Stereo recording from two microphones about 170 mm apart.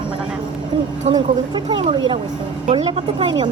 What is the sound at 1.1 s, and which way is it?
Speech, 30° right (ahead or behind).